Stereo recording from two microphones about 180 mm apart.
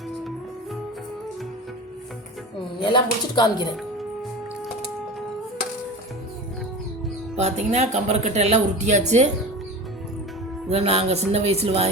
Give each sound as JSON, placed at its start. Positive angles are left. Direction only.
{"t": 2.8, "sound": "speech", "side_deg": 25}
{"t": 7.3, "sound": "speech", "side_deg": -40}
{"t": 10.7, "sound": "speech", "side_deg": -35}